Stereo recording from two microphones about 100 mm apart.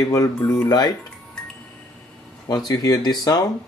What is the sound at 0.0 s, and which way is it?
Speech, 35° left (ahead or behind).